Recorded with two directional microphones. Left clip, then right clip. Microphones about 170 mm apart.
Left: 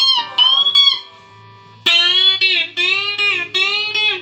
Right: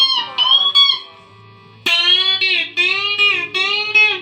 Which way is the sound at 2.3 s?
30° left (ahead or behind).